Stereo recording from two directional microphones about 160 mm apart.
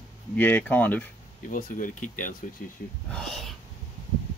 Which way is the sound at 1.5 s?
55° left (ahead or behind).